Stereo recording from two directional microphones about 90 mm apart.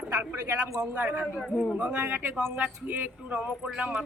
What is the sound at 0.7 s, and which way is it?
A man's voice, 15° right (ahead or behind).